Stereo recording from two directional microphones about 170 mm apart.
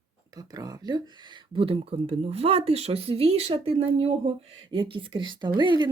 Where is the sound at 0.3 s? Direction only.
20° right (ahead or behind).